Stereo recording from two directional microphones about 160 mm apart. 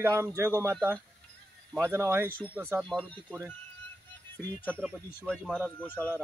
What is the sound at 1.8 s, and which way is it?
Speech, 15° right (ahead or behind).